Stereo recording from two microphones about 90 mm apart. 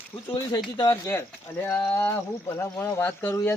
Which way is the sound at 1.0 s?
25° left (ahead or behind).